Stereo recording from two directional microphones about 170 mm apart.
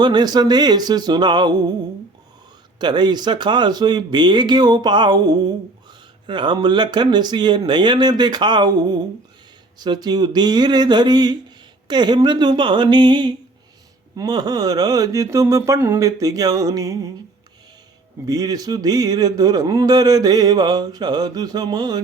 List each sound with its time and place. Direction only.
0.0 s speech: 25° right (ahead or behind)
2.7 s speech: 25° right (ahead or behind)
18.3 s speech: 20° right (ahead or behind)